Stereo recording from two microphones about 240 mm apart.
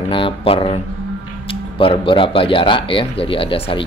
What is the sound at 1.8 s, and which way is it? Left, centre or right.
Speech, left.